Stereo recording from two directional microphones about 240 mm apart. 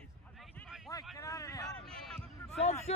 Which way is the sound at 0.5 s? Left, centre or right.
Centre.